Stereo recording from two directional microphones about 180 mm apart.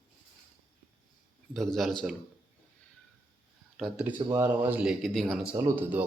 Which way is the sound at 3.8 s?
5° right (ahead or behind).